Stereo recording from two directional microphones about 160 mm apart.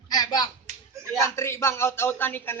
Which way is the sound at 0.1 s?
25° left (ahead or behind).